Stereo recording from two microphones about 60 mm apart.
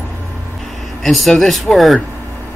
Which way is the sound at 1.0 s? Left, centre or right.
Centre.